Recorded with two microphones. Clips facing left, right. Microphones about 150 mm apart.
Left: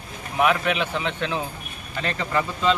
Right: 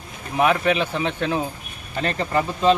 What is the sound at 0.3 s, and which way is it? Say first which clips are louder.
Speech: right 2 dB; 30° right (ahead or behind).